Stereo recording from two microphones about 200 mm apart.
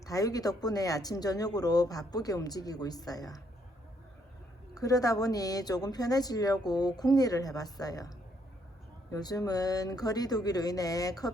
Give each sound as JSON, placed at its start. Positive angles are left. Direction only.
{"t": 0.0, "sound": "speech", "side_deg": 15}
{"t": 4.7, "sound": "speech", "side_deg": 15}
{"t": 9.1, "sound": "speech", "side_deg": 20}